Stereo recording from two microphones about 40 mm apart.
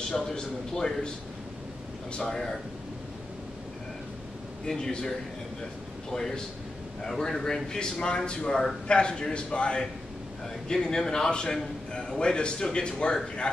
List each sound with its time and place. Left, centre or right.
0.3 s a man's voice: centre
2.1 s a man's voice: centre
4.6 s a man's voice: centre